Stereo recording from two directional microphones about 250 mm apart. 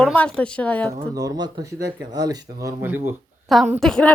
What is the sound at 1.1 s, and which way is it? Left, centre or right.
Speech, centre.